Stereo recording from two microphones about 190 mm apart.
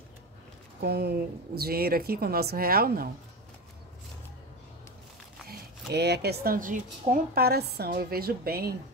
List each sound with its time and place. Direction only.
0.7 s speech: 55° right (ahead or behind)
5.5 s speech: 60° right (ahead or behind)